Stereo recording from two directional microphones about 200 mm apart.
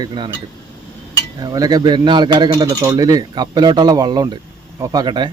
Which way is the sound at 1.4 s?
20° right (ahead or behind).